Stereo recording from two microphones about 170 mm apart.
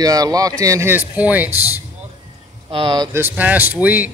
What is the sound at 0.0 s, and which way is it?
Speech, 20° right (ahead or behind).